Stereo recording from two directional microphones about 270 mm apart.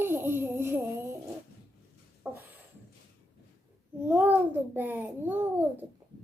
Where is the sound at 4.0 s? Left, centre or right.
Centre.